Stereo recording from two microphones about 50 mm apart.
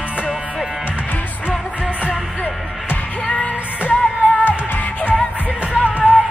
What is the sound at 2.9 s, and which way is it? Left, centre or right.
Music, left.